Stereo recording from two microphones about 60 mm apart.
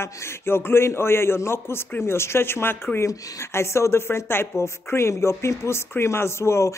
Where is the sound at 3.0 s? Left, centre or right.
Left.